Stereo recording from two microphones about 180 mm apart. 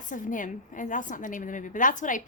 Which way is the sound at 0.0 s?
45° left (ahead or behind).